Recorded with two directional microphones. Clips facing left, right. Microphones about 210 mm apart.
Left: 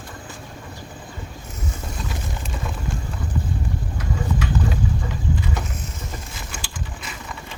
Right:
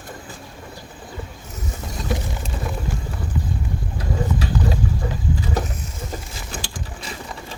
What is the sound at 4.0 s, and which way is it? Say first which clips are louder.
Clip-clop: right 2 dB; 35° right (ahead or behind).